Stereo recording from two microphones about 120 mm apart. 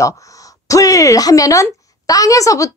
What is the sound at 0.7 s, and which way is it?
A woman's voice, 30° left (ahead or behind).